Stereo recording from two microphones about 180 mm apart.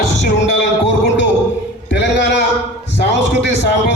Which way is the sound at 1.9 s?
80° left.